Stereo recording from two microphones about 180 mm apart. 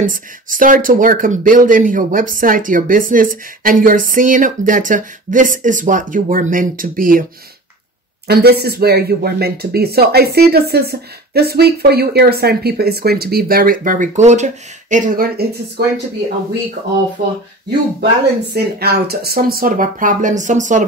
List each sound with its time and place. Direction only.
0.0 s speech: 50° right (ahead or behind)
8.3 s speech: 65° right (ahead or behind)
18.5 s speech: 60° right (ahead or behind); by 20.8 s 45° right (ahead or behind)